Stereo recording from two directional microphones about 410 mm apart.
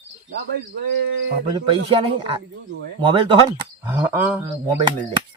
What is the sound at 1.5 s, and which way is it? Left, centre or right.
Speech, centre.